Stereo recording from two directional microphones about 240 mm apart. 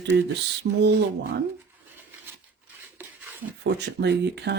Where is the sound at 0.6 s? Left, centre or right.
Right.